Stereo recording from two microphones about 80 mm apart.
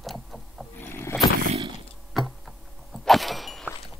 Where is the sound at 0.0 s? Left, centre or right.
Centre.